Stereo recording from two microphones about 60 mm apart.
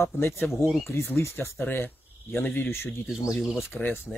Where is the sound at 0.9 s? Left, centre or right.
Left.